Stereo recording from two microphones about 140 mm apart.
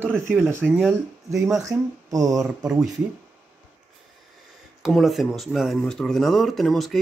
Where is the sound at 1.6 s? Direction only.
25° right (ahead or behind).